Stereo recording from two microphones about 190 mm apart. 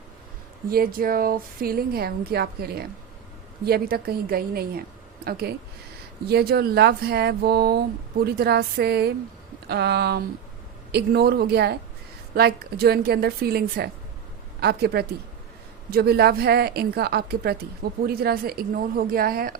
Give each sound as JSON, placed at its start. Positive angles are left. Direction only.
{"t": 0.7, "sound": "a woman's voice", "side_deg": -50}